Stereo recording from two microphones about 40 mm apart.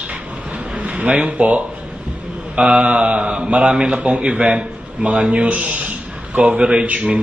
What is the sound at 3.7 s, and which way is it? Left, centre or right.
Speech, right.